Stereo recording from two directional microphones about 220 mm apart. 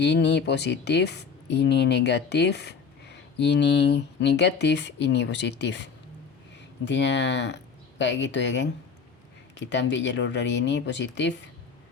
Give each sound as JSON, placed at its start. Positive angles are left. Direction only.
{"t": 0.0, "sound": "speech", "side_deg": 50}